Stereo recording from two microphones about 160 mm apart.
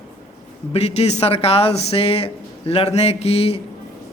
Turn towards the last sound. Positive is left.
turn(degrees=40)  # may be behind; listen again after turning